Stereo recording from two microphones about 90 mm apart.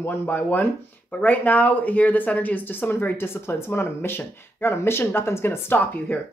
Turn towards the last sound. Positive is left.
turn(degrees=25)  # may be behind; listen again after turning